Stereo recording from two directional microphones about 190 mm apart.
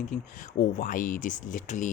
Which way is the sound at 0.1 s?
45° left (ahead or behind).